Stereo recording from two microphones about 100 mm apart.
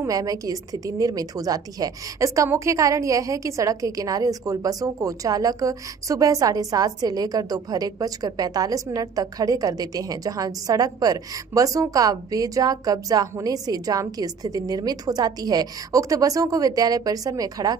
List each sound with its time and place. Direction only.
0.0 s a woman's voice: 35° right (ahead or behind)